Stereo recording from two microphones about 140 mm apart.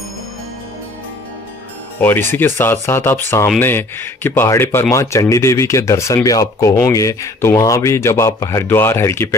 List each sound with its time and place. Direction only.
2.0 s speech: 15° left (ahead or behind)